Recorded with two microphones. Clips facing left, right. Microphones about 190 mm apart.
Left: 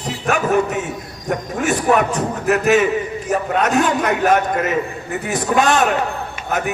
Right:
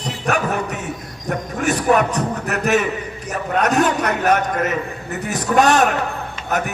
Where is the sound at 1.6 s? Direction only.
40° right (ahead or behind).